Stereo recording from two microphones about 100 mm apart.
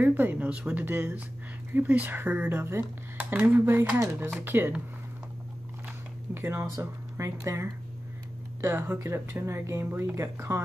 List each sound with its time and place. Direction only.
0.0 s speech: 20° right (ahead or behind)
6.3 s speech: 25° right (ahead or behind)